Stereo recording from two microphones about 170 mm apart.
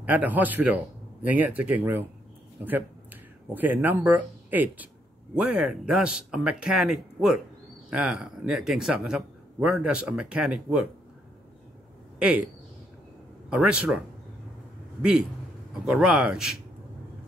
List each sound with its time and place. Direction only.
0.0 s speech: 10° right (ahead or behind)
12.2 s speech: 5° right (ahead or behind)
13.5 s speech: 5° right (ahead or behind)